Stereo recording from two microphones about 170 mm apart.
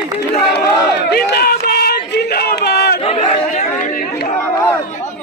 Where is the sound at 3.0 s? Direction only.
35° left (ahead or behind).